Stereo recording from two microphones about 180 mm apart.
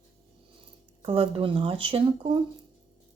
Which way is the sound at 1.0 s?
30° right (ahead or behind).